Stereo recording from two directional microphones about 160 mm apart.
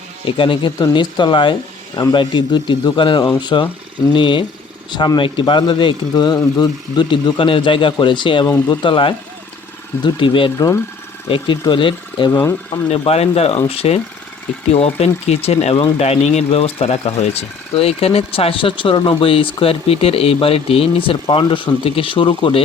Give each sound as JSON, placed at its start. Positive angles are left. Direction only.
{"t": 0.3, "sound": "speech", "side_deg": 30}
{"t": 12.3, "sound": "speech", "side_deg": 15}
{"t": 12.9, "sound": "speech", "side_deg": 40}